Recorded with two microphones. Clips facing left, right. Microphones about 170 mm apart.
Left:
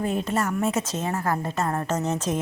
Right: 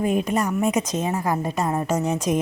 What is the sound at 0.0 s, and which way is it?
A woman's voice, 15° right (ahead or behind).